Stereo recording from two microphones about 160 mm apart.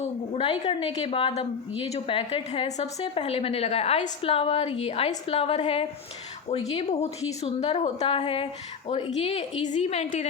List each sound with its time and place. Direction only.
0.6 s a woman's voice: 35° left (ahead or behind)